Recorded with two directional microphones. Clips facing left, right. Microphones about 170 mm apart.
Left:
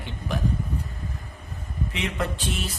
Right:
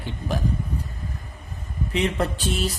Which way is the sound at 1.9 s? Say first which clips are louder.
Right 6 dB; 35° right (ahead or behind).